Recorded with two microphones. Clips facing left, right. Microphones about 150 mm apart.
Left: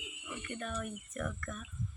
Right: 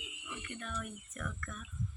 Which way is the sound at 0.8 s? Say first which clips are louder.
Left 4 dB; 35° left (ahead or behind).